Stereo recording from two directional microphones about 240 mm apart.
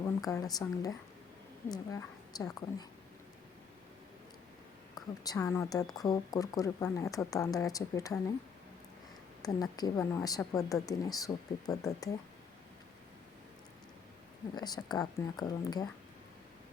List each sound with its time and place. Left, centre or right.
0.2 s speech: centre
4.9 s speech: centre
9.4 s speech: centre
14.5 s speech: centre